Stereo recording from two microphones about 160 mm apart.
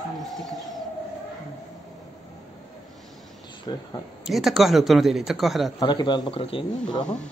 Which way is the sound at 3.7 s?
30° left (ahead or behind).